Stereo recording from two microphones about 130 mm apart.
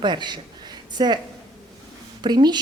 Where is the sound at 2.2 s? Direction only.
35° right (ahead or behind).